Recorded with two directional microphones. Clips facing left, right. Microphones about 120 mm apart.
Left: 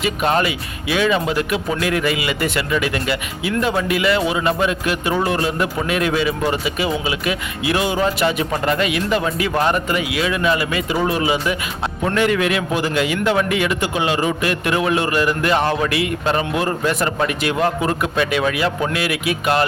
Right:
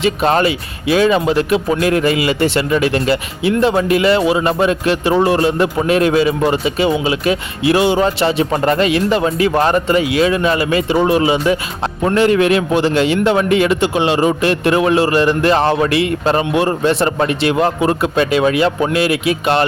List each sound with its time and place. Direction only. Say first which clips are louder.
0.0 s a man's voice: right 5 dB; 30° right (ahead or behind)